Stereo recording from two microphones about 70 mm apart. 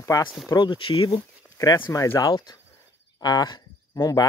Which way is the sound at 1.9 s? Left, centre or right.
Left.